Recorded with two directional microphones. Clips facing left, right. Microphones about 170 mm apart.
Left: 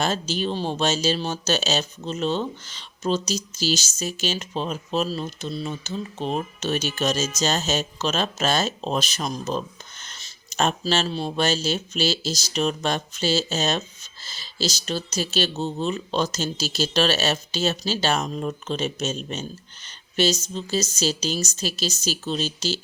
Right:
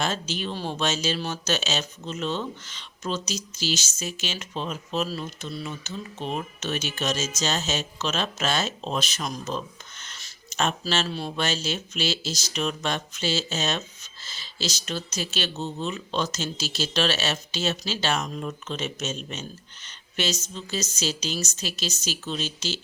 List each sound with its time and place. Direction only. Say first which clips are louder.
0.0 s speech: left 4 dB; 35° left (ahead or behind)